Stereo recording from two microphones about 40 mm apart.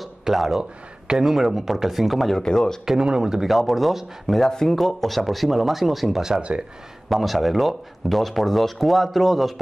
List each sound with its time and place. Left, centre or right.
0.2 s speech: centre
2.4 s speech: centre
3.0 s speech: centre
3.4 s speech: centre
4.5 s speech: centre